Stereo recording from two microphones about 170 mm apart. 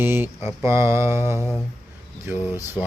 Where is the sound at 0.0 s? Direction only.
15° right (ahead or behind).